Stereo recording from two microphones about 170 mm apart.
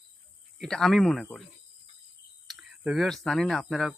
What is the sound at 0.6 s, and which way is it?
Speech, 5° left (ahead or behind).